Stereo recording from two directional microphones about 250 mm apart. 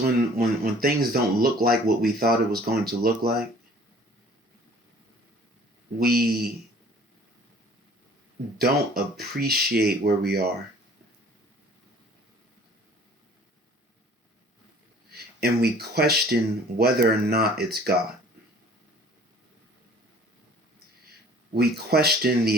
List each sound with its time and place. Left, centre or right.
0.0 s speech: right
6.0 s speech: right
9.1 s speech: right
15.1 s speech: right
21.5 s speech: right